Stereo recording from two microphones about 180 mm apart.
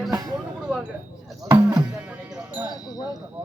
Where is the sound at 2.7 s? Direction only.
20° left (ahead or behind).